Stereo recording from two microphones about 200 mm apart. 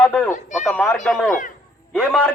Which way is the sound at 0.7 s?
10° left (ahead or behind).